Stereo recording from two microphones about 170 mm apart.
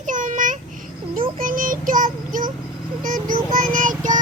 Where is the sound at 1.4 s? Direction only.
55° right (ahead or behind).